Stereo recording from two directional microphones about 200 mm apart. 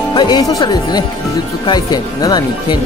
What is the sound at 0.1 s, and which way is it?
Speech, 20° left (ahead or behind).